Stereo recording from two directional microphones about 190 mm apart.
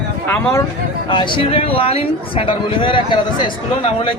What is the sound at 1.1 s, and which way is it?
A man's voice, 25° left (ahead or behind).